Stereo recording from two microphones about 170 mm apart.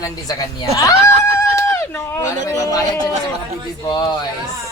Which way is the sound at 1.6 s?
15° left (ahead or behind).